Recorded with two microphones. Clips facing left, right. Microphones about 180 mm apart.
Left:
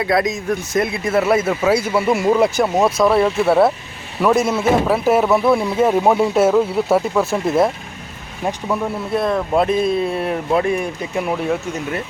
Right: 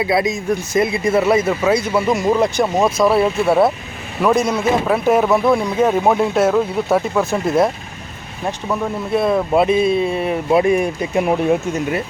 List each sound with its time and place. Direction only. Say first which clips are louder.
0.0 s a man's voice: right 1 dB; 5° right (ahead or behind)
9.1 s a man's voice: right 2 dB; 5° right (ahead or behind)
10.5 s speech: right 5 dB; 15° right (ahead or behind)